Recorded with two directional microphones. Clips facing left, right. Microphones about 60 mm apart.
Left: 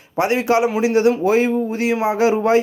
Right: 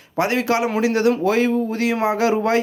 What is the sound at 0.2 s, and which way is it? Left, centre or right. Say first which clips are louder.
Speech: left 3 dB; left.